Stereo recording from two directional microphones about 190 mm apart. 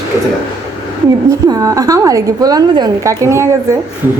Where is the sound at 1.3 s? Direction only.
20° right (ahead or behind).